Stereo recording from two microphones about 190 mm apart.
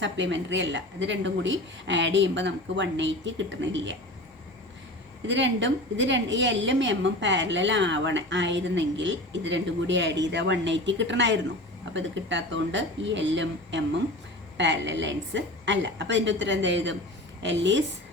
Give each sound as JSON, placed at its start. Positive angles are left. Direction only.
{"t": 0.0, "sound": "a woman's voice", "side_deg": -70}
{"t": 5.2, "sound": "a woman's voice", "side_deg": -70}